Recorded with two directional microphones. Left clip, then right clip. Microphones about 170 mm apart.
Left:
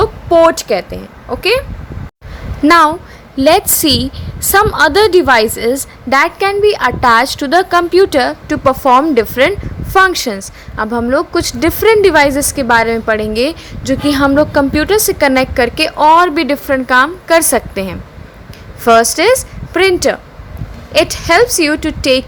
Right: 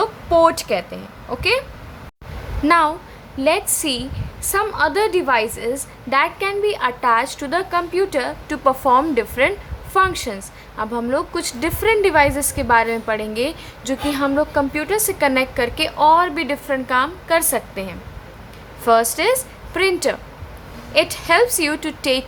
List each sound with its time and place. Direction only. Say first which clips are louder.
0.0 s a woman's voice: left 6 dB; 20° left (ahead or behind)
2.6 s a woman's voice: left 8 dB; 30° left (ahead or behind)
19.1 s a woman's voice: left 8 dB; 30° left (ahead or behind)